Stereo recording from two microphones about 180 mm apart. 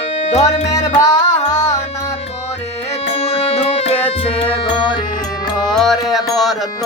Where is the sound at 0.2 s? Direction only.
40° left (ahead or behind).